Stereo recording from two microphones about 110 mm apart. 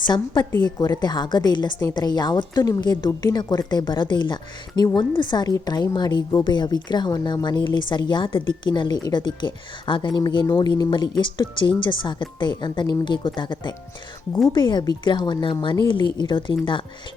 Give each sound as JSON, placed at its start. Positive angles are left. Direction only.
{"t": 0.6, "sound": "a woman's voice", "side_deg": 40}